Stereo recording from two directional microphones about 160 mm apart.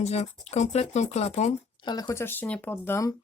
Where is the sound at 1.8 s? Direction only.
25° left (ahead or behind).